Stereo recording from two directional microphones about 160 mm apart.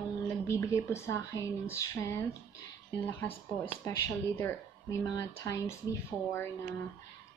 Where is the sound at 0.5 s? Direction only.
20° left (ahead or behind).